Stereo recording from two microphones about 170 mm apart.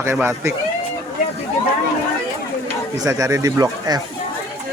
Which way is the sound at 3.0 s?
20° right (ahead or behind).